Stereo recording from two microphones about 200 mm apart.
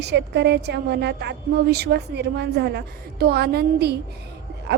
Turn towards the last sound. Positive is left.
turn(degrees=-55)  # may be behind; listen again after turning